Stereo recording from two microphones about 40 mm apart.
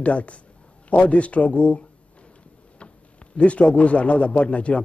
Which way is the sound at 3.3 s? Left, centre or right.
Left.